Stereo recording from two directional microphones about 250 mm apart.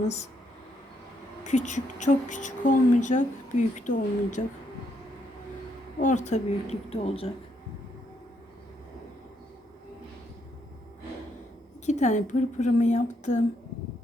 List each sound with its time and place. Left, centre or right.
1.5 s a woman's voice: left
6.0 s a woman's voice: left
11.9 s a woman's voice: left